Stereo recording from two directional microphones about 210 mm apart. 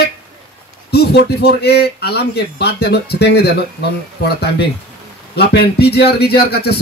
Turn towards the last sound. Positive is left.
turn(degrees=50)  # may be behind; listen again after turning